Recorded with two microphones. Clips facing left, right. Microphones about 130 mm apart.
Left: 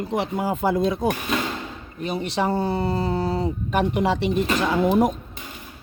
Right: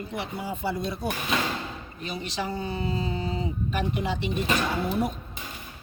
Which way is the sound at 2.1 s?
60° left (ahead or behind).